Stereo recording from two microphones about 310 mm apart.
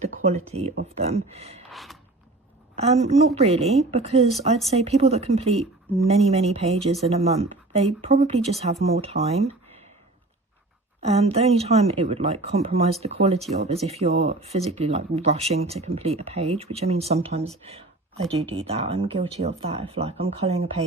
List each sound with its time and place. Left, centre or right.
0.3 s speech: centre
1.7 s a sound: centre
2.7 s speech: centre
11.0 s speech: centre